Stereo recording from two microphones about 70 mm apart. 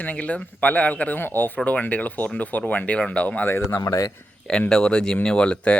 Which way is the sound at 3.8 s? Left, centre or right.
Left.